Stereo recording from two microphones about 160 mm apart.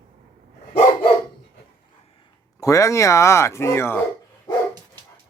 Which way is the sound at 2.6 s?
20° left (ahead or behind).